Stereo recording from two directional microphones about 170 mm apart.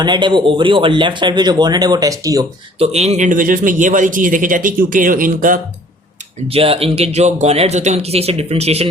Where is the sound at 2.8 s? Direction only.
40° right (ahead or behind).